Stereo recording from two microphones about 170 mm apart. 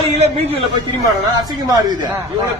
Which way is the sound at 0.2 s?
35° right (ahead or behind).